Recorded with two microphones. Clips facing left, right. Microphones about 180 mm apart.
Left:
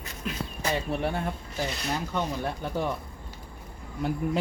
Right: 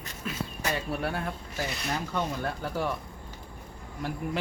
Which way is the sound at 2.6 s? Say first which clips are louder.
Left 1 dB; 25° left (ahead or behind).